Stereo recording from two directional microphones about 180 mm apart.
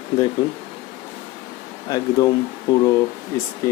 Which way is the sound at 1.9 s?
20° left (ahead or behind).